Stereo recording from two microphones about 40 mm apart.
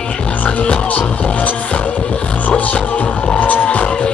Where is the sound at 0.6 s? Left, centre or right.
Left.